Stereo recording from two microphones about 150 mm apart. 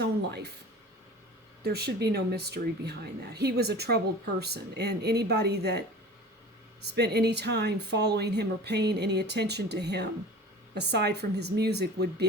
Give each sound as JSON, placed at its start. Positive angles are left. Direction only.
{"t": 0.0, "sound": "speech", "side_deg": -90}
{"t": 1.6, "sound": "a woman's voice", "side_deg": -90}
{"t": 6.8, "sound": "a woman's voice", "side_deg": -90}